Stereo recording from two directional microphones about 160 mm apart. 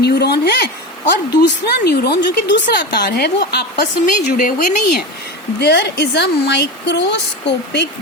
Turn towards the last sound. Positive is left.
turn(degrees=90)